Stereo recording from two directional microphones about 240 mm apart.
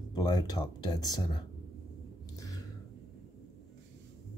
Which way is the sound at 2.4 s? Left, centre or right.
Centre.